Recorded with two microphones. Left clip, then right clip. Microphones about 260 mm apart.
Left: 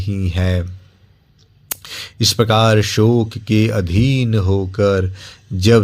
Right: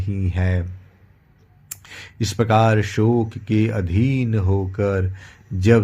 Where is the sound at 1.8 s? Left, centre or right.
Left.